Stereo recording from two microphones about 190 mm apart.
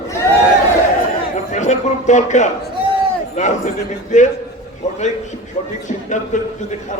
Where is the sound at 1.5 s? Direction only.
40° left (ahead or behind).